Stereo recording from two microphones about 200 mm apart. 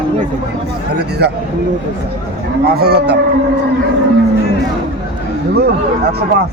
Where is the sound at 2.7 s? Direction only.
55° right (ahead or behind).